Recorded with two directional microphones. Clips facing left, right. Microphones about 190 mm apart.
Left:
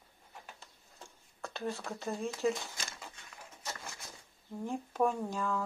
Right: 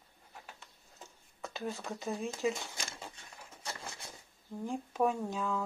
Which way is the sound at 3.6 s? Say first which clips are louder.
Right 1 dB; 30° right (ahead or behind).